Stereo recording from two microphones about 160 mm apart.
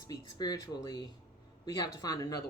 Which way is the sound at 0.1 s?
25° left (ahead or behind).